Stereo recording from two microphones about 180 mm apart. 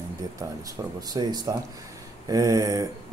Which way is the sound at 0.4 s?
20° right (ahead or behind).